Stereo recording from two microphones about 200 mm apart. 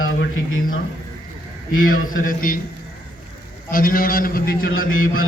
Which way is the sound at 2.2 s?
45° left (ahead or behind).